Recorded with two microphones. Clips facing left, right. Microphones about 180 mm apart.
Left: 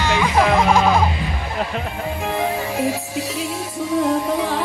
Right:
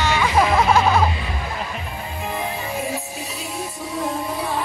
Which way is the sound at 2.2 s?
90° left.